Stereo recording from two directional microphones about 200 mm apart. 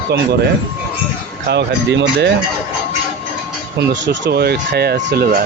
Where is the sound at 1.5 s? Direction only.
60° right (ahead or behind).